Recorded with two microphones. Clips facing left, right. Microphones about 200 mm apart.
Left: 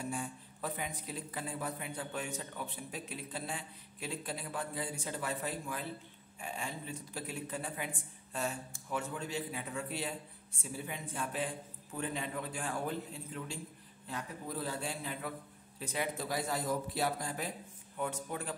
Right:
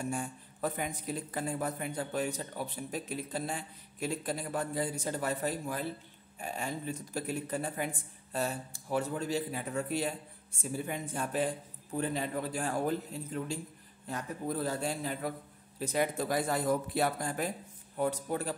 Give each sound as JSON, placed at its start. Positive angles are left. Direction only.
{"t": 0.0, "sound": "a man's voice", "side_deg": -45}
{"t": 17.9, "sound": "speech", "side_deg": -40}